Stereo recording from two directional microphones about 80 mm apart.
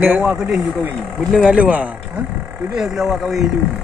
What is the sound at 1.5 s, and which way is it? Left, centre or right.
Speech, centre.